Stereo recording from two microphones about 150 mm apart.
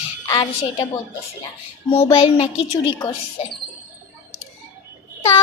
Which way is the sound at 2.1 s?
40° left (ahead or behind).